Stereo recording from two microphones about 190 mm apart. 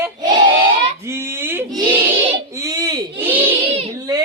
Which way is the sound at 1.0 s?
15° right (ahead or behind).